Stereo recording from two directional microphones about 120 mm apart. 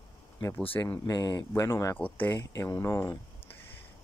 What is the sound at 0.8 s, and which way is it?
Speech, 25° left (ahead or behind).